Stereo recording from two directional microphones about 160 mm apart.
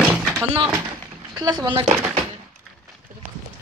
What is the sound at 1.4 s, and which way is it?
Speech, 25° right (ahead or behind).